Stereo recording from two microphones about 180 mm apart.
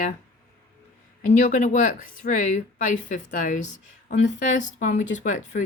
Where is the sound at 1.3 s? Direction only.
45° left (ahead or behind).